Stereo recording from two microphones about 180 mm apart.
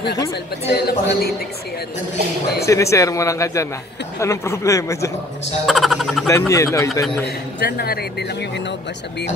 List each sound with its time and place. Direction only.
0.7 s speech: 70° left (ahead or behind)
2.6 s speech: 15° left (ahead or behind)
5.7 s speech: centre (ahead or behind)
6.2 s speech: 15° left (ahead or behind)
7.6 s speech: 60° left (ahead or behind)